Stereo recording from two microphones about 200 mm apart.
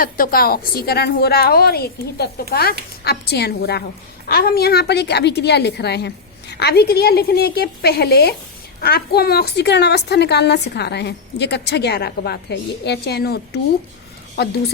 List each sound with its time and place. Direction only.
0.0 s a woman's voice: 45° left (ahead or behind)